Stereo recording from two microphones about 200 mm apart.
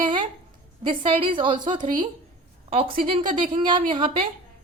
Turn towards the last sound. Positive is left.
turn(degrees=-25)  # may be behind; listen again after turning